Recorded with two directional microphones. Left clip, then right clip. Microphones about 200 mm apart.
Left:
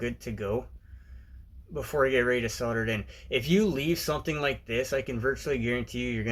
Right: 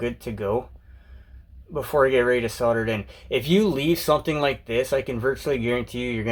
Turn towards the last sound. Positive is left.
turn(degrees=0)  # may be behind; listen again after turning